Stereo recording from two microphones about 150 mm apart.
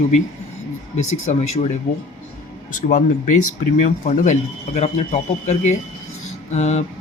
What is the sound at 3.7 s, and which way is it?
Speech, 60° left (ahead or behind).